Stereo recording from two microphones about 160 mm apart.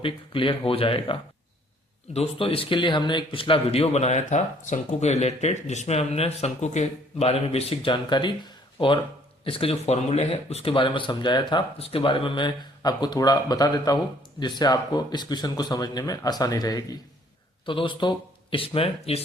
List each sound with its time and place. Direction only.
0.0 s a man's voice: 35° left (ahead or behind)
2.1 s a man's voice: 35° left (ahead or behind)